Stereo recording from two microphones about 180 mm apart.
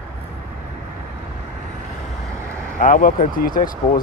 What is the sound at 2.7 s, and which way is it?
Speech, 50° left (ahead or behind).